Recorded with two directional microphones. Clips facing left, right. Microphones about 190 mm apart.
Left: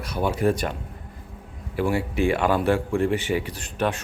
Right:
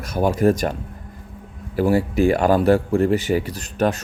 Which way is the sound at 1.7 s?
40° right (ahead or behind).